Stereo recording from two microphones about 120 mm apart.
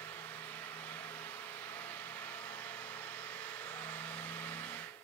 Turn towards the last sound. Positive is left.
turn(degrees=15)  # may be behind; listen again after turning